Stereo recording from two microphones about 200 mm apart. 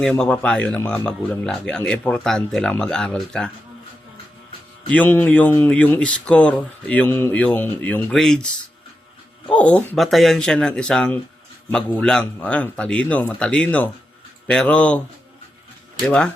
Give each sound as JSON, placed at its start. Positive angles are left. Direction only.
{"t": 0.0, "sound": "speech", "side_deg": 5}
{"t": 4.9, "sound": "speech", "side_deg": 10}
{"t": 9.5, "sound": "speech", "side_deg": 5}